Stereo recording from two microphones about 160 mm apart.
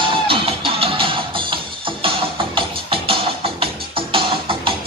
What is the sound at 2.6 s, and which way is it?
Music, 35° right (ahead or behind).